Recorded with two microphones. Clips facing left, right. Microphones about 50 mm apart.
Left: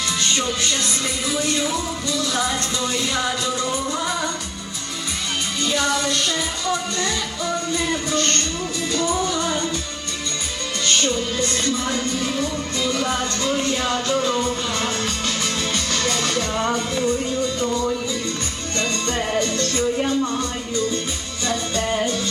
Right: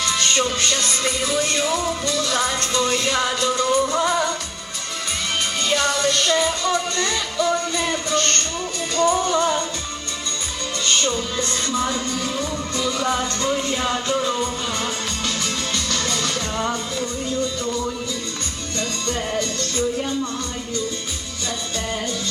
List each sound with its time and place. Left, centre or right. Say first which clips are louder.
0.0 s music: right 2 dB; right
5.6 s music: right 1 dB; right
13.8 s music: even; centre
15.7 s music: left 1 dB; centre
19.0 s music: left 1 dB; left
21.8 s music: left 5 dB; left